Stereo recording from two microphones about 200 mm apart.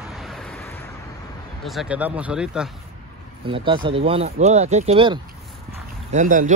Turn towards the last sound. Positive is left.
turn(degrees=-40)  # may be behind; listen again after turning